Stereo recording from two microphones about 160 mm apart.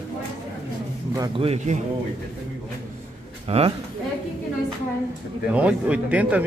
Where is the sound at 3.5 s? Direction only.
40° right (ahead or behind).